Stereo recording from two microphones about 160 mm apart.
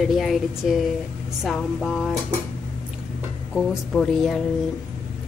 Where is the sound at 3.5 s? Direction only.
5° left (ahead or behind).